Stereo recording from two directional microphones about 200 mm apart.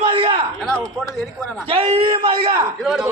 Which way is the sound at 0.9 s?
Centre (ahead or behind).